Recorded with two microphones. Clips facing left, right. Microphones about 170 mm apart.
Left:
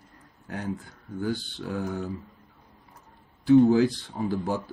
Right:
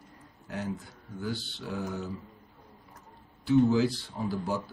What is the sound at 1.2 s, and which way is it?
Speech, 50° left (ahead or behind).